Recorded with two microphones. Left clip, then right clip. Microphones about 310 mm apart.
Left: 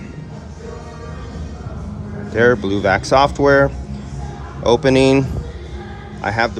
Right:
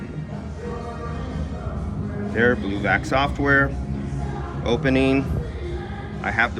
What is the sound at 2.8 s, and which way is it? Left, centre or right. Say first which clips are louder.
Speech: left 8 dB; centre.